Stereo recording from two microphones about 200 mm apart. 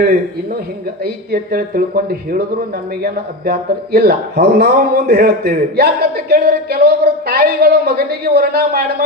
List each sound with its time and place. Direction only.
1.0 s speech: 50° right (ahead or behind)
3.0 s speech: 50° right (ahead or behind)